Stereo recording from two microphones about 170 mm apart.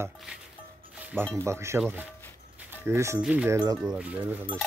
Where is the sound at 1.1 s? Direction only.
10° right (ahead or behind).